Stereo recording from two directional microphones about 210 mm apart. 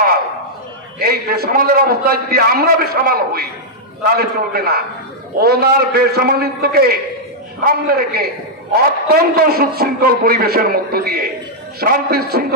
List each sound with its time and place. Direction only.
0.9 s a man's voice: 50° right (ahead or behind)